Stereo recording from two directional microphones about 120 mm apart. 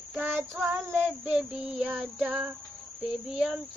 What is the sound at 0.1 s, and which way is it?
Child singing, 15° right (ahead or behind).